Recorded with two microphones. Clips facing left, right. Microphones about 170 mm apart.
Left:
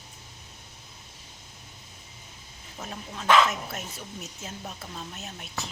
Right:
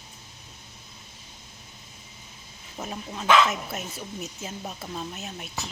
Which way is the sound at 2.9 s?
10° right (ahead or behind).